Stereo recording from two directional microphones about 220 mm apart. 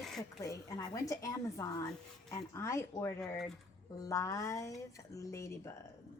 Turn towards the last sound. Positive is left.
turn(degrees=15)  # may be behind; listen again after turning